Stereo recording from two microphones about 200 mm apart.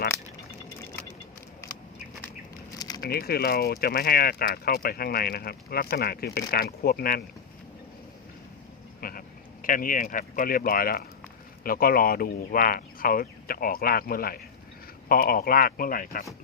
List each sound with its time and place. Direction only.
2.7 s a sound: 20° left (ahead or behind)
3.0 s speech: 50° left (ahead or behind)
9.0 s speech: 45° left (ahead or behind)